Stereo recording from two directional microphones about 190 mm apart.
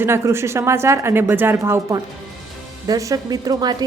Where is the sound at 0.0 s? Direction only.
15° right (ahead or behind).